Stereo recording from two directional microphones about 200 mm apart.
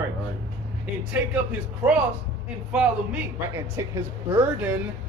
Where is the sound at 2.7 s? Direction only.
5° right (ahead or behind).